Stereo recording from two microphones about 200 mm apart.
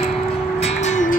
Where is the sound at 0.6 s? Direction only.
35° left (ahead or behind).